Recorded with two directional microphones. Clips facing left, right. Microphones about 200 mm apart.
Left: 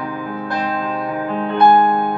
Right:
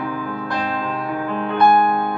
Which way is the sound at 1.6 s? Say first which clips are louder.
Left 3 dB; 20° left (ahead or behind).